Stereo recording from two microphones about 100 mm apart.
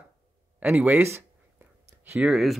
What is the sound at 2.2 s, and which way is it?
Speech, 5° right (ahead or behind).